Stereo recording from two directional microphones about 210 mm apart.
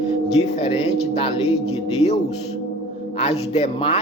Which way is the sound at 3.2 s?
30° left (ahead or behind).